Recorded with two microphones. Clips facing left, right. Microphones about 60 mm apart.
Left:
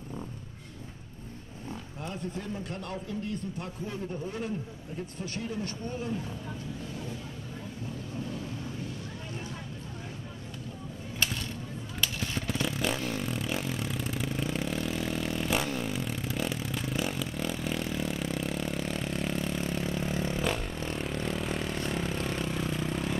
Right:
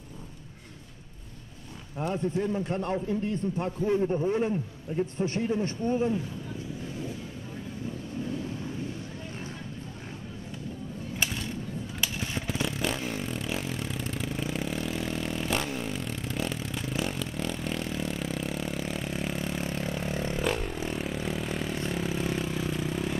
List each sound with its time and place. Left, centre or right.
2.0 s a man's voice: right
12.0 s vehicle: centre